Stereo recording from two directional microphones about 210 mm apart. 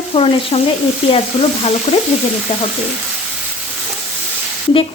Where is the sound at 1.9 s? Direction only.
30° left (ahead or behind).